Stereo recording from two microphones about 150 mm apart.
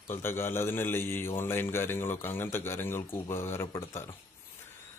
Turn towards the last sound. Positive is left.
turn(degrees=15)  # may be behind; listen again after turning